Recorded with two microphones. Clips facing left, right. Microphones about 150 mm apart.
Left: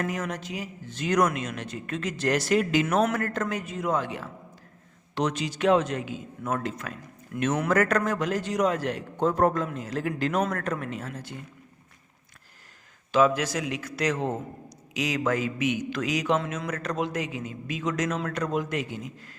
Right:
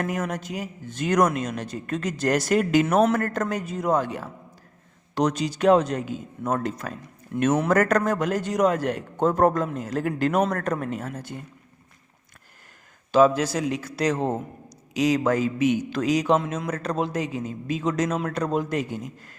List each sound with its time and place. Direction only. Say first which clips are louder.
0.1 s speech: right 3 dB; 45° right (ahead or behind)
3.0 s a man's voice: right 4 dB; 35° right (ahead or behind)
7.3 s speech: right 5 dB; 25° right (ahead or behind)
7.7 s speech: right 3 dB; 40° right (ahead or behind)
13.1 s a man's voice: right 4 dB; 35° right (ahead or behind)